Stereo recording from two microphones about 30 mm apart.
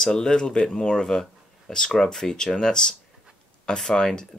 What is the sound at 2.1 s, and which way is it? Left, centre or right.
Speech, centre.